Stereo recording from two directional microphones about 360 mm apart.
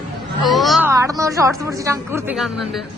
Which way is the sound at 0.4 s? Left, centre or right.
Centre.